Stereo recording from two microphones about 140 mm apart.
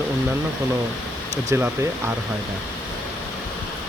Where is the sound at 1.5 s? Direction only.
15° right (ahead or behind).